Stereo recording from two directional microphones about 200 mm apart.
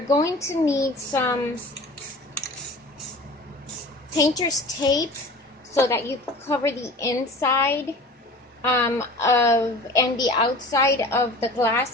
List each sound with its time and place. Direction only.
0.2 s a woman's voice: 15° left (ahead or behind)
4.2 s a woman's voice: 20° left (ahead or behind)